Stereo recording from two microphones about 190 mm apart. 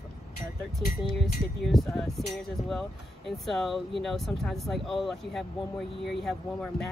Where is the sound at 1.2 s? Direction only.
Centre (ahead or behind).